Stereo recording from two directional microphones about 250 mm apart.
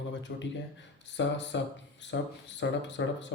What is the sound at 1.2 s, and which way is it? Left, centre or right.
Speech, left.